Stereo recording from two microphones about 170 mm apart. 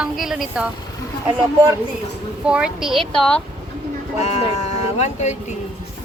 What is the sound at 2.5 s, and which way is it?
Speech, 5° right (ahead or behind).